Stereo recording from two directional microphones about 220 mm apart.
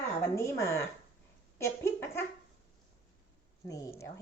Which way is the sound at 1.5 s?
10° left (ahead or behind).